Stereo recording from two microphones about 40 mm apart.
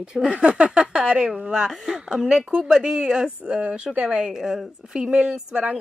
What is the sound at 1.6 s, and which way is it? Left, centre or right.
A woman's voice, centre.